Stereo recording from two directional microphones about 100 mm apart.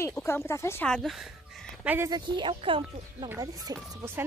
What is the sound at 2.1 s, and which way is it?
Speech, 50° right (ahead or behind).